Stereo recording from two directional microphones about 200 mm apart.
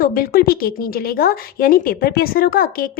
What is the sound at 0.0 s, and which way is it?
A woman's voice, 50° left (ahead or behind).